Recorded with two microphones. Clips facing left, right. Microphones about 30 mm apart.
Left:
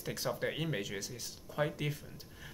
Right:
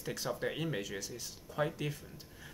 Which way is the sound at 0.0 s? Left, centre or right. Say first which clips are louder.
Left 1 dB; centre.